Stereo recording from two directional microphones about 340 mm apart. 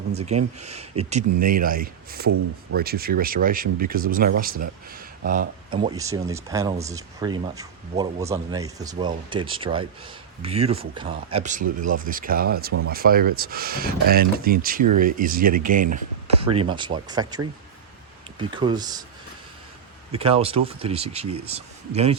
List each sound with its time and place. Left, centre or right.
0.1 s speech: centre
20.1 s speech: centre